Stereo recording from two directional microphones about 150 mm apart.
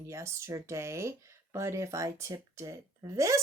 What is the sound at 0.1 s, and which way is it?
Speech, 20° right (ahead or behind).